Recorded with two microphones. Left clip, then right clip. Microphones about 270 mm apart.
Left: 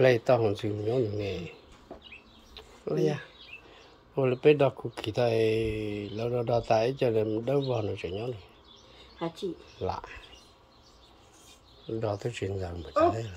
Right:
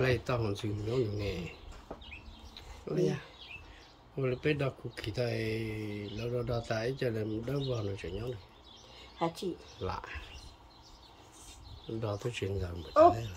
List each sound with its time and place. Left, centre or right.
0.0 s speech: centre
2.5 s a sound: centre
4.1 s speech: centre
9.8 s speech: centre
12.0 s speech: centre